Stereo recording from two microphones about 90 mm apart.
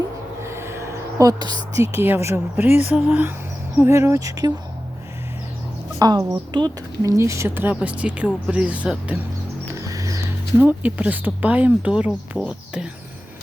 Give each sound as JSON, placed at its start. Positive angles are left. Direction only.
{"t": 0.4, "sound": "a sound", "side_deg": -30}
{"t": 1.3, "sound": "a woman's voice", "side_deg": -50}
{"t": 1.7, "sound": "speech", "side_deg": -30}
{"t": 6.0, "sound": "a woman's voice", "side_deg": -45}
{"t": 7.0, "sound": "speech", "side_deg": -35}
{"t": 9.7, "sound": "music", "side_deg": -35}
{"t": 10.6, "sound": "speech", "side_deg": -20}